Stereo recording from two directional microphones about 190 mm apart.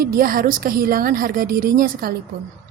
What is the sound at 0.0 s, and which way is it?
A woman's voice, 50° right (ahead or behind).